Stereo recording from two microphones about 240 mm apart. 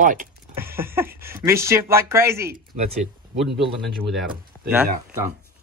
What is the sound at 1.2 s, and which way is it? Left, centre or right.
Speech, centre.